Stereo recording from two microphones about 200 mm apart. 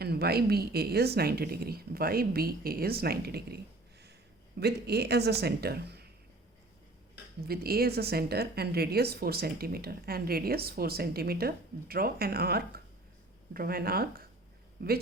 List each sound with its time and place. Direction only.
0.0 s a woman's voice: 50° right (ahead or behind)
7.4 s a woman's voice: 50° right (ahead or behind)